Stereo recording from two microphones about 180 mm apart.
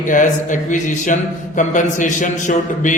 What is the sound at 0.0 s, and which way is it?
A man's voice, 45° left (ahead or behind).